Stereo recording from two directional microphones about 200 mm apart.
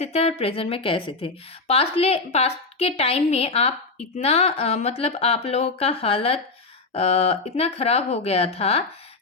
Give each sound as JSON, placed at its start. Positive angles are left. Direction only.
{"t": 0.0, "sound": "a woman's voice", "side_deg": 35}